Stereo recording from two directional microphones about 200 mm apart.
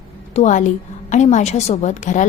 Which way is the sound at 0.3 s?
40° left (ahead or behind).